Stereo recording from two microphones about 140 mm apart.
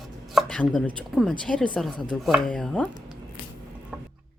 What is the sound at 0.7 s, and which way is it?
Speech, 10° left (ahead or behind).